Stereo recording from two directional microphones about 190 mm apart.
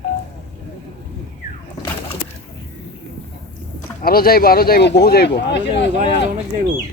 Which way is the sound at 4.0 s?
50° left (ahead or behind).